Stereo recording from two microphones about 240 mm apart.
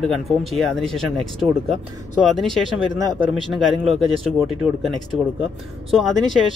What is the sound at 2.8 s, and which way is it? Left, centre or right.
Speech, centre.